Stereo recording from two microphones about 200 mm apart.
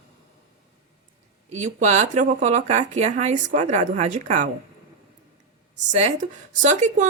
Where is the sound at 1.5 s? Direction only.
35° right (ahead or behind).